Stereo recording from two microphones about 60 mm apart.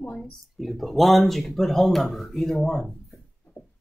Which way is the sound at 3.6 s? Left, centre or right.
Left.